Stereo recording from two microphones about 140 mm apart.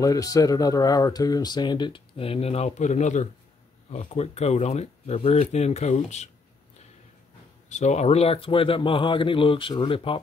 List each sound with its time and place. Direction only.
0.0 s speech: 25° left (ahead or behind); by 6.3 s 55° left (ahead or behind)
7.7 s speech: 55° left (ahead or behind)